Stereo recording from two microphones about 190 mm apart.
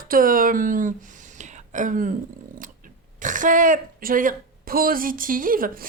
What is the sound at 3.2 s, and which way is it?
A woman's voice, 45° right (ahead or behind).